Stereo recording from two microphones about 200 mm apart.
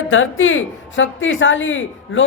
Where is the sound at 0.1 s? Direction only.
80° left.